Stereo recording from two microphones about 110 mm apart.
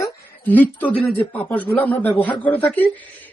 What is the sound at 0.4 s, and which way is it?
Speech, 15° left (ahead or behind).